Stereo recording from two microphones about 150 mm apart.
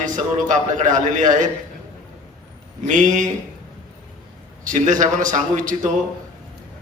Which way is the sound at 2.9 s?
55° right (ahead or behind).